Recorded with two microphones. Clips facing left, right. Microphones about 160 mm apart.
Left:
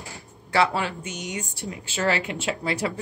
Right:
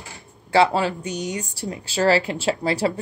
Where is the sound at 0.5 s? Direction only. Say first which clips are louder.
Right 5 dB; 30° right (ahead or behind).